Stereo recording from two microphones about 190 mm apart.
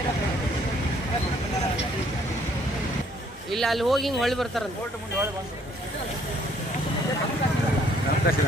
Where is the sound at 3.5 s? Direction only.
Centre (ahead or behind).